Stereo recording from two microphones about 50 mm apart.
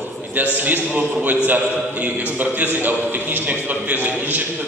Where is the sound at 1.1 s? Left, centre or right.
Right.